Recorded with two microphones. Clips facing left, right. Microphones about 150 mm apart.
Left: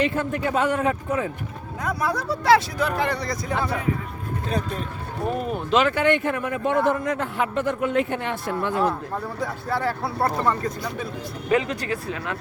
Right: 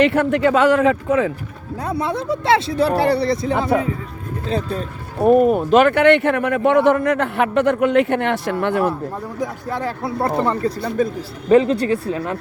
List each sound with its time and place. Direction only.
0.0 s speech: 75° right (ahead or behind)
1.8 s speech: 25° right (ahead or behind)
5.2 s speech: 50° right (ahead or behind); by 8.8 s 70° right (ahead or behind)
9.4 s speech: 15° right (ahead or behind)
10.8 s speech: 45° right (ahead or behind)